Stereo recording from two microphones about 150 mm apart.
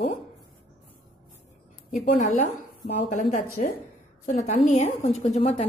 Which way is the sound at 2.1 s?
55° left (ahead or behind).